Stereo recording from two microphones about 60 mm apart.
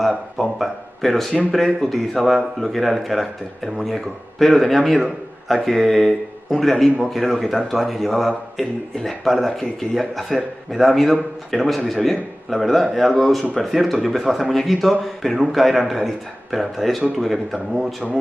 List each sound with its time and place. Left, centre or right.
0.4 s speech: centre